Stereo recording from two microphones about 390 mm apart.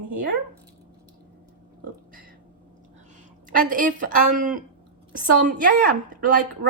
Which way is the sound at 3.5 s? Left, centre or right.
Right.